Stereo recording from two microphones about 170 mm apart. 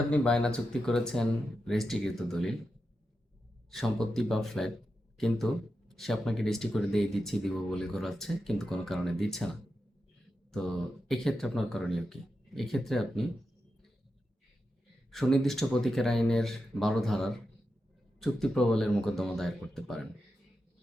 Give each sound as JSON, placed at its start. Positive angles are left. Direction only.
{"t": 0.1, "sound": "speech", "side_deg": 5}
{"t": 3.7, "sound": "speech", "side_deg": 0}
{"t": 10.5, "sound": "speech", "side_deg": 0}
{"t": 15.1, "sound": "speech", "side_deg": 0}